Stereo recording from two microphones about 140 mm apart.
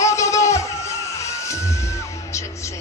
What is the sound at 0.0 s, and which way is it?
Music, 20° left (ahead or behind).